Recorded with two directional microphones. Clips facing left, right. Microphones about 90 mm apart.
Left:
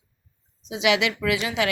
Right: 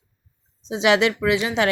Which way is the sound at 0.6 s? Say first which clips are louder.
Right 4 dB; 35° right (ahead or behind).